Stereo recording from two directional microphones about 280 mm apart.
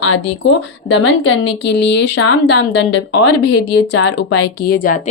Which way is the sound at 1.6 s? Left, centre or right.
Left.